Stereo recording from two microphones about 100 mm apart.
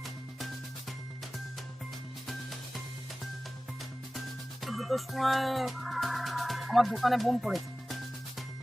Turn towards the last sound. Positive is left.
turn(degrees=0)  # may be behind; listen again after turning